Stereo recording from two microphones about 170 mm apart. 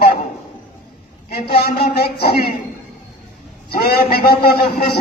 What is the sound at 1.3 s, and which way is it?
A man's voice, 65° left (ahead or behind).